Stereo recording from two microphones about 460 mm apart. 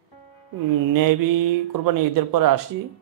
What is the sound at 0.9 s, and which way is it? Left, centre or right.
A man's voice, right.